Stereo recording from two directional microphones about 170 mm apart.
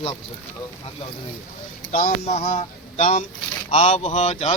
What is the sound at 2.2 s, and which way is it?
A man's voice, 40° left (ahead or behind).